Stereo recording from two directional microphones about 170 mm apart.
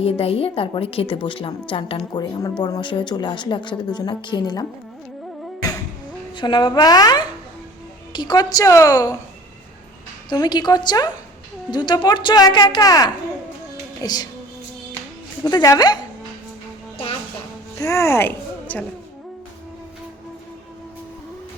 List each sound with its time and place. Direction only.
0.0 s a woman's voice: 35° left (ahead or behind)
6.3 s a woman's voice: 25° left (ahead or behind)
10.2 s a woman's voice: 25° left (ahead or behind)
15.4 s a woman's voice: 20° left (ahead or behind)
17.7 s speech: 20° left (ahead or behind)